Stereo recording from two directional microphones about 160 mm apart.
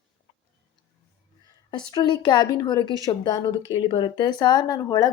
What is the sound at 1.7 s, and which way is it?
Speech, 30° left (ahead or behind).